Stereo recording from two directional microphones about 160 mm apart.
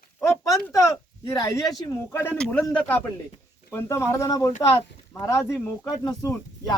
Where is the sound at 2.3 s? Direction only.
5° left (ahead or behind).